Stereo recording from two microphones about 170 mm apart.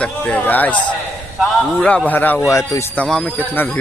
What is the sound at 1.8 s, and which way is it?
Speech, 10° left (ahead or behind).